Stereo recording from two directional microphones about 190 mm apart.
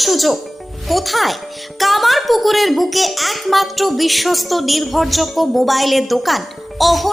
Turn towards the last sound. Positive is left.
turn(degrees=0)  # may be behind; listen again after turning